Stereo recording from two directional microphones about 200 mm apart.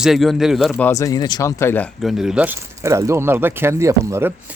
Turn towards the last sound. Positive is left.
turn(degrees=-10)  # may be behind; listen again after turning